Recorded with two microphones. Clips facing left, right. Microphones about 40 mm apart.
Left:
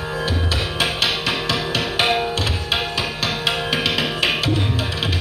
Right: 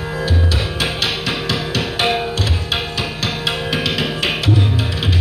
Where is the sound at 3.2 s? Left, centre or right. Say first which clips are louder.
Even; centre.